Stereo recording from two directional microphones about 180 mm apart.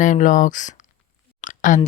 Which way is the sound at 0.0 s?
45° left (ahead or behind).